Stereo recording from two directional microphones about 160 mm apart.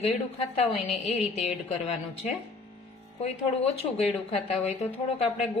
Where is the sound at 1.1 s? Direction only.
40° left (ahead or behind).